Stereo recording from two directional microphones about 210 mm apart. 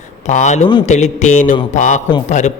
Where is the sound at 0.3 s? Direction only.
35° left (ahead or behind).